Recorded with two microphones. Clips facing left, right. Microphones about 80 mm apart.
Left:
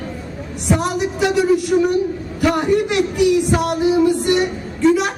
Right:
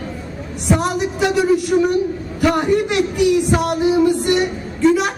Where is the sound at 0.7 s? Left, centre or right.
Right.